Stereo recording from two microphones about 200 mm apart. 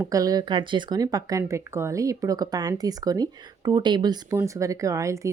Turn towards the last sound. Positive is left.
turn(degrees=-15)  # may be behind; listen again after turning